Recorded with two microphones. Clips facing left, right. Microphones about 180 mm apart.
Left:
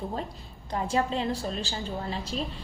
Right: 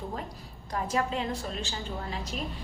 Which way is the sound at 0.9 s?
30° left (ahead or behind).